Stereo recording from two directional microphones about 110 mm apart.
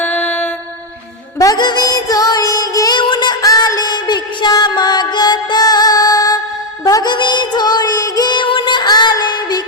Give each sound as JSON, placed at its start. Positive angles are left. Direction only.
{"t": 0.0, "sound": "mantra", "side_deg": 15}
{"t": 1.4, "sound": "music", "side_deg": 35}